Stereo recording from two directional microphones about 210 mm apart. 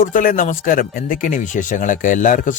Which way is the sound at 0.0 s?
40° left (ahead or behind).